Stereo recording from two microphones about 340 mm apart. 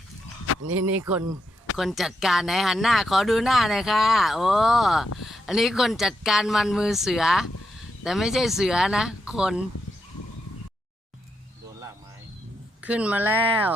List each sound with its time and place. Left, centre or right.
0.6 s speech: right
1.7 s speech: centre
12.8 s speech: centre